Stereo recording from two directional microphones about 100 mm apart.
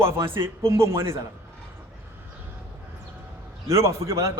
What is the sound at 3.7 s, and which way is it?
Speech, 30° right (ahead or behind).